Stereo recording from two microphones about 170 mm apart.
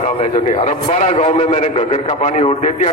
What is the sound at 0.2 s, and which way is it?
A man's voice, 40° left (ahead or behind).